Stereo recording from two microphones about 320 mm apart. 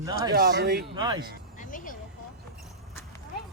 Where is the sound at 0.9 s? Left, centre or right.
Centre.